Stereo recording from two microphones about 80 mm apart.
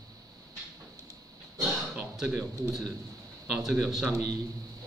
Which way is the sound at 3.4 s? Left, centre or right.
Centre.